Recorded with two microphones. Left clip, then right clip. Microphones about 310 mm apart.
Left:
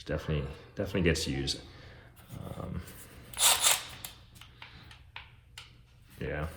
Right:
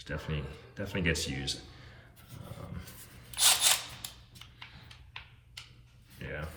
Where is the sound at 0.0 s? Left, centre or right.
Centre.